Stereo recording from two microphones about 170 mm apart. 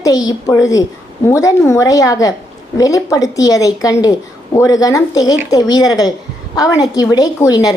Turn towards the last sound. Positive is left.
turn(degrees=20)  # may be behind; listen again after turning